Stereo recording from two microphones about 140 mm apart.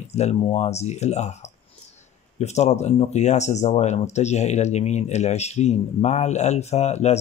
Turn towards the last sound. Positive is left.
turn(degrees=50)  # may be behind; listen again after turning